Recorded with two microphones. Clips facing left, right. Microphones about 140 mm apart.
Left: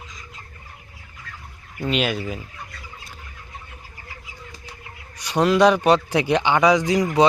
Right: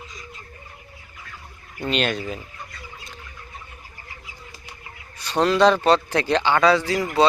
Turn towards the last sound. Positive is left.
turn(degrees=15)  # may be behind; listen again after turning